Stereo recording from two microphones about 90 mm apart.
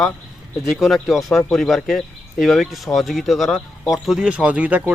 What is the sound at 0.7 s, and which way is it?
Speech, 5° right (ahead or behind).